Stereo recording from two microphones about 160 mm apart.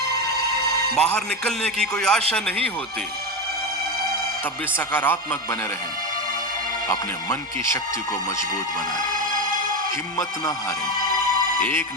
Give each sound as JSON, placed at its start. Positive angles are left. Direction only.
{"t": 0.9, "sound": "a man's voice", "side_deg": 5}
{"t": 4.9, "sound": "speech", "side_deg": 15}
{"t": 6.8, "sound": "speech", "side_deg": 20}
{"t": 11.5, "sound": "speech", "side_deg": 10}